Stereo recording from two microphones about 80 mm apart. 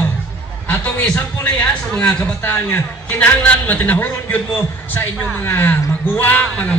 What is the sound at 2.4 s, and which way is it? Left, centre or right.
A man's voice, left.